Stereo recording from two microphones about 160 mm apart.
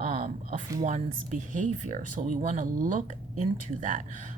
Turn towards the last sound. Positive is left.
turn(degrees=-50)  # may be behind; listen again after turning